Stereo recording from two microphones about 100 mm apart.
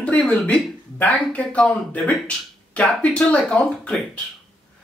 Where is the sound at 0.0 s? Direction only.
10° left (ahead or behind).